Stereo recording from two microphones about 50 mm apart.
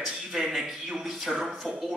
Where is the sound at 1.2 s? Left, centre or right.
Centre.